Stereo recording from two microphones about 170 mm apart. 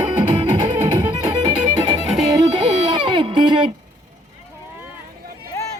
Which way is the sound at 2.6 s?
30° right (ahead or behind).